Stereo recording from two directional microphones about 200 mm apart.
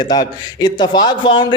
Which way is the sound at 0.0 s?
20° left (ahead or behind).